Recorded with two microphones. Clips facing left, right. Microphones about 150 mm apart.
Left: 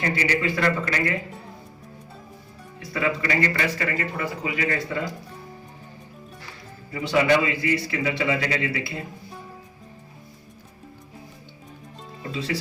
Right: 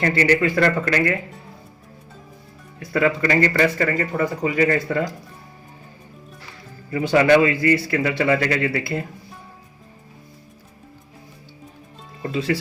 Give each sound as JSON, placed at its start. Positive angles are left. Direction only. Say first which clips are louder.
{"t": 0.0, "sound": "a man's voice", "louder": "right 6 dB", "side_deg": -55}
{"t": 2.9, "sound": "speech", "louder": "right 6 dB", "side_deg": -50}
{"t": 6.9, "sound": "a man's voice", "louder": "right 5 dB", "side_deg": -55}
{"t": 12.3, "sound": "speech", "louder": "right 6 dB", "side_deg": -50}